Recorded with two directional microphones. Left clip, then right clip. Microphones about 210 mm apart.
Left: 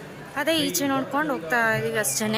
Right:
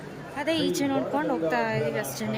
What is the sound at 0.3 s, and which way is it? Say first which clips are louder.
A woman's voice: left 3 dB; 5° right (ahead or behind).